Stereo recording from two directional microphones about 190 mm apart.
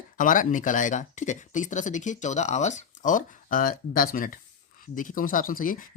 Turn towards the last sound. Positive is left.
turn(degrees=45)  # may be behind; listen again after turning